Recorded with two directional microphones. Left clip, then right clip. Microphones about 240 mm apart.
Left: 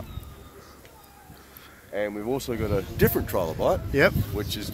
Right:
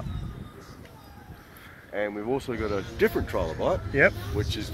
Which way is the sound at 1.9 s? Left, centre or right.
Left.